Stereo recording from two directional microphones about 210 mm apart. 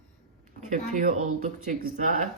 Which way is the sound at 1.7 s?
40° right (ahead or behind).